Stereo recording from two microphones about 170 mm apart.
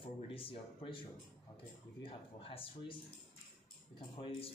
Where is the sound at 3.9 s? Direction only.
30° left (ahead or behind).